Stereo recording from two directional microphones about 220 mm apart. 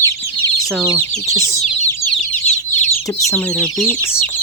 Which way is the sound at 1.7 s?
35° left (ahead or behind).